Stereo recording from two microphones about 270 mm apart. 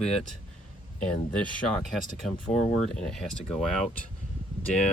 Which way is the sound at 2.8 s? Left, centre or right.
Centre.